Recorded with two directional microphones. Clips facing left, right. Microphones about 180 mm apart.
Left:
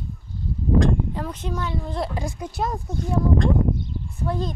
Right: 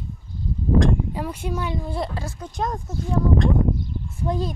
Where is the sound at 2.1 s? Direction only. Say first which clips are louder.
Left 1 dB; 15° left (ahead or behind).